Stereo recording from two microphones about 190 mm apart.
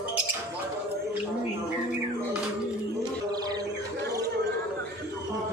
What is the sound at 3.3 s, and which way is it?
Bird, 20° right (ahead or behind).